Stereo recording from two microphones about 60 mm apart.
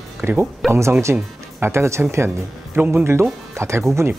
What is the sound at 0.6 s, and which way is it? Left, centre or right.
Speech, centre.